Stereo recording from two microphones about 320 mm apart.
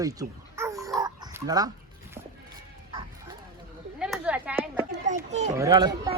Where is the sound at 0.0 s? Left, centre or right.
Centre.